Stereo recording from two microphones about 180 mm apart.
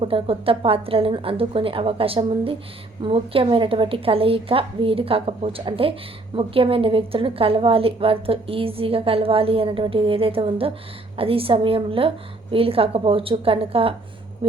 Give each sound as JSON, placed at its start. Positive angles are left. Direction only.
{"t": 0.0, "sound": "a woman's voice", "side_deg": -30}